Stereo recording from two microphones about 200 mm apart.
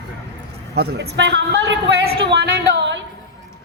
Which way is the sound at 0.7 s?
55° right (ahead or behind).